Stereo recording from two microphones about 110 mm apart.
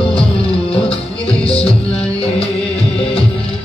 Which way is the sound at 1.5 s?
60° left (ahead or behind).